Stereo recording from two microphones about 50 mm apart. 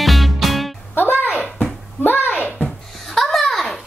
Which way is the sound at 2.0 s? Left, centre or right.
Left.